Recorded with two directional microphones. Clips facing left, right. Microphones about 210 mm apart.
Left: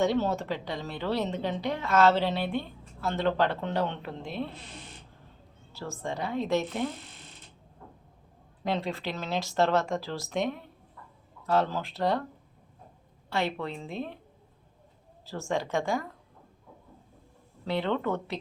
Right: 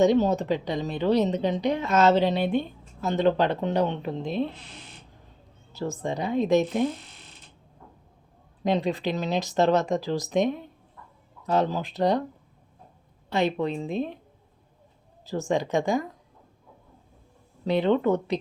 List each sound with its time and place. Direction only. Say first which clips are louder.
0.0 s a woman's voice: right 6 dB; 20° right (ahead or behind)
5.7 s a woman's voice: right 6 dB; 20° right (ahead or behind)
8.6 s a woman's voice: right 6 dB; 15° right (ahead or behind)
13.3 s a woman's voice: right 6 dB; 20° right (ahead or behind)
15.3 s a woman's voice: right 5 dB; 15° right (ahead or behind)
17.7 s a woman's voice: right 7 dB; 15° right (ahead or behind)